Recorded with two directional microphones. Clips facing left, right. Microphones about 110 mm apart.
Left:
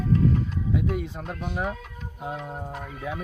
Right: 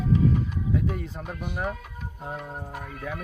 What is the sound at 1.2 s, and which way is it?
Speech, 5° right (ahead or behind).